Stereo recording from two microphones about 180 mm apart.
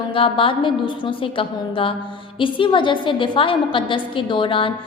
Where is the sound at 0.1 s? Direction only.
30° left (ahead or behind).